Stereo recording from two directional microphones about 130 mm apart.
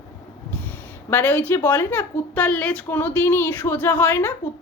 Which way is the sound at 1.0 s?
15° left (ahead or behind).